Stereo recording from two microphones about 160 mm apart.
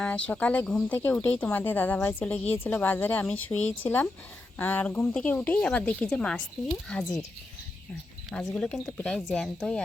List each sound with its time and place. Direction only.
0.0 s a woman's voice: 10° left (ahead or behind)
0.9 s a woman's voice: 15° left (ahead or behind)
8.3 s speech: 5° left (ahead or behind)